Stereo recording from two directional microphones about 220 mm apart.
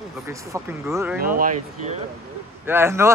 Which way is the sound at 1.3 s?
35° right (ahead or behind).